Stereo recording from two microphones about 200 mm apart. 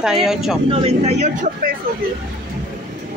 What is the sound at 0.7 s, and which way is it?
Speech, 30° right (ahead or behind).